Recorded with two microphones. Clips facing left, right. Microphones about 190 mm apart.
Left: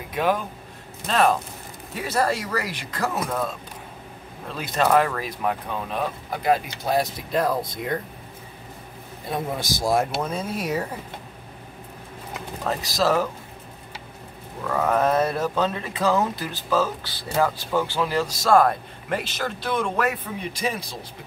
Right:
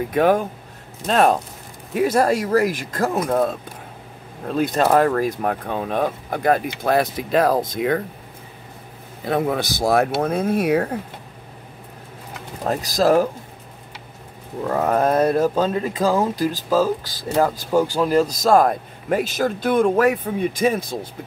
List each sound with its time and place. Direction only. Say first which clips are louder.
0.1 s speech: right 5 dB; 50° right (ahead or behind)
4.5 s speech: right 4 dB; 45° right (ahead or behind); by 8.0 s 90° right
9.2 s speech: right 7 dB; 65° right (ahead or behind)
12.6 s speech: right 5 dB; 45° right (ahead or behind)
14.6 s speech: right 3 dB; 35° right (ahead or behind)
15.0 s speech: right 4 dB; 50° right (ahead or behind)
15.4 s speech: right 5 dB; 40° right (ahead or behind)